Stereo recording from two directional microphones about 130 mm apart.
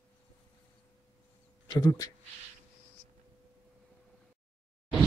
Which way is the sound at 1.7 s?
30° left (ahead or behind).